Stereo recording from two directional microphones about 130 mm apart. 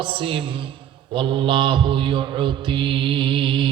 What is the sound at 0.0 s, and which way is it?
Mantra, 40° right (ahead or behind).